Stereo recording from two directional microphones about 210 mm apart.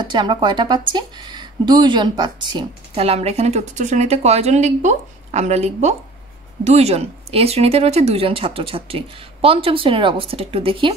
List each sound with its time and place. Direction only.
0.0 s speech: 20° right (ahead or behind)